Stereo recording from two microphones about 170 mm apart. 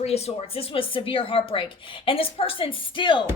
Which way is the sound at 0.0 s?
35° left (ahead or behind).